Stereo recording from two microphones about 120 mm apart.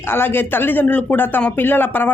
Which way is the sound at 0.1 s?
20° left (ahead or behind).